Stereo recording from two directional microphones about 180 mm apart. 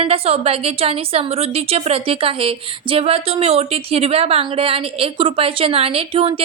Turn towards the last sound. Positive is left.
turn(degrees=-30)  # may be behind; listen again after turning